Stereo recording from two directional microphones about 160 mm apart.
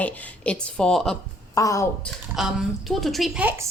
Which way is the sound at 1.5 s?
20° left (ahead or behind).